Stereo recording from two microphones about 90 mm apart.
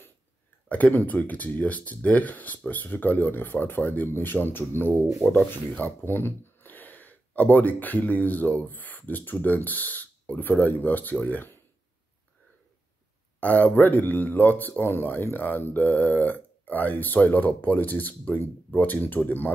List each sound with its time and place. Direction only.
0.7 s speech: 15° left (ahead or behind)
13.4 s speech: 20° left (ahead or behind)